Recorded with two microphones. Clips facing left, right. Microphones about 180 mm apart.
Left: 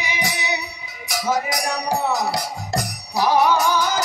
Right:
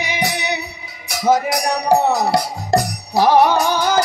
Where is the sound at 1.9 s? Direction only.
65° right (ahead or behind).